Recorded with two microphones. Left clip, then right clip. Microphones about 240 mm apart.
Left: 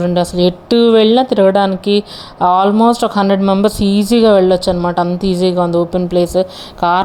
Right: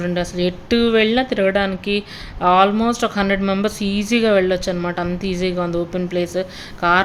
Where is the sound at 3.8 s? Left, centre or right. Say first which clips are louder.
Left 7 dB; left.